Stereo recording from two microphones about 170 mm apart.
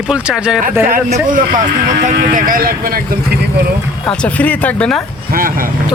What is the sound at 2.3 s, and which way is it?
A man's voice, 55° right (ahead or behind).